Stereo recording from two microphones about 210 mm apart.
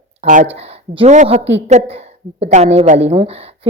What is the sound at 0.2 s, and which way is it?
A woman's voice, 35° right (ahead or behind).